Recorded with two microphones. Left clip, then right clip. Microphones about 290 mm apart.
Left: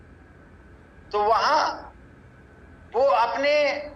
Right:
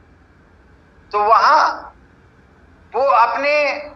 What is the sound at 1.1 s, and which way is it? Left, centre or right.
Speech, centre.